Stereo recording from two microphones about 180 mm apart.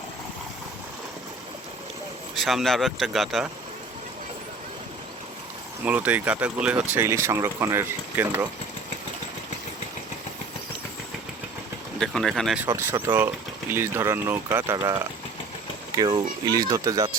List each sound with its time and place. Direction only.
2.3 s speech: centre (ahead or behind)
5.8 s speech: 10° right (ahead or behind)
11.9 s speech: centre (ahead or behind)
12.6 s speech: 15° right (ahead or behind)